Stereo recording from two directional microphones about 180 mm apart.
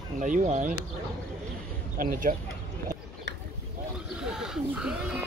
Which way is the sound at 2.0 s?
50° right (ahead or behind).